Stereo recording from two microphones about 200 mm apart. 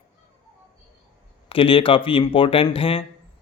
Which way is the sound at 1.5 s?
25° left (ahead or behind).